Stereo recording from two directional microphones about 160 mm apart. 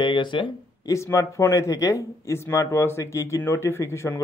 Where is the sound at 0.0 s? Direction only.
30° left (ahead or behind).